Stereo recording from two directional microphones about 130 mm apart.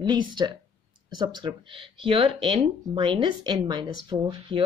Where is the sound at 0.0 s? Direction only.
35° right (ahead or behind).